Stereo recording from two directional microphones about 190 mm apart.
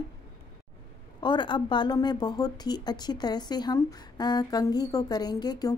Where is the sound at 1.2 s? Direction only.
25° left (ahead or behind).